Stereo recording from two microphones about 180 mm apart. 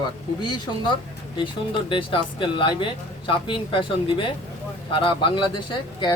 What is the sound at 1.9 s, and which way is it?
Speech, 30° left (ahead or behind).